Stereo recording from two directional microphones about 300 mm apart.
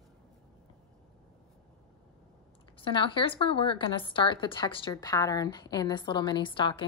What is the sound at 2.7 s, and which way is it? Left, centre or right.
A woman's voice, centre.